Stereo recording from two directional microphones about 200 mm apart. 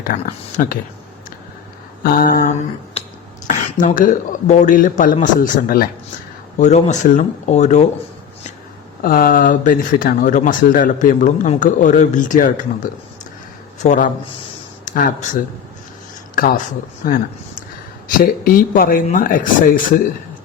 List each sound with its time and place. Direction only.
0.1 s speech: 40° left (ahead or behind)
2.1 s speech: 45° left (ahead or behind)
3.0 s finger snapping: 30° left (ahead or behind)
3.4 s speech: 40° left (ahead or behind)
6.6 s speech: 35° left (ahead or behind)
9.0 s speech: 45° left (ahead or behind)
18.2 s speech: 45° left (ahead or behind)